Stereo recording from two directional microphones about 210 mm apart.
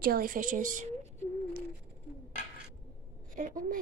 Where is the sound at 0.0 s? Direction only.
45° right (ahead or behind).